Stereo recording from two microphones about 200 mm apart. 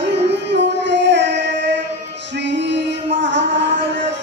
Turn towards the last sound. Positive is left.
turn(degrees=-60)  # may be behind; listen again after turning